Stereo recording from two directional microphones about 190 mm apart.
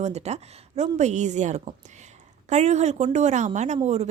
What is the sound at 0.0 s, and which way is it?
A woman's voice, 35° right (ahead or behind).